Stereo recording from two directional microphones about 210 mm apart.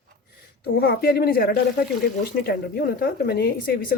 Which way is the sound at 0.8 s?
45° left (ahead or behind).